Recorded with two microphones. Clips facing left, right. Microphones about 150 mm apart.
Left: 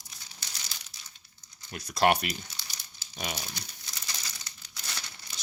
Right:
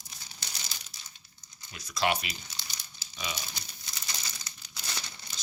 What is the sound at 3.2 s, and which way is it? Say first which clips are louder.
Speech: left 2 dB; 50° left (ahead or behind).